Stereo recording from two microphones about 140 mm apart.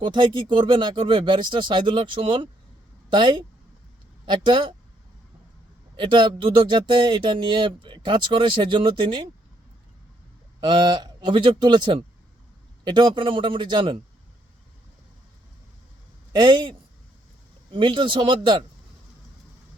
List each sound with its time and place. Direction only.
0.0 s speech: 35° right (ahead or behind)
6.0 s speech: 35° right (ahead or behind)
10.6 s speech: 30° right (ahead or behind)
16.3 s speech: 35° right (ahead or behind)